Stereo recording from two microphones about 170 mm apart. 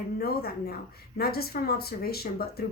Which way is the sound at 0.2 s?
65° left (ahead or behind).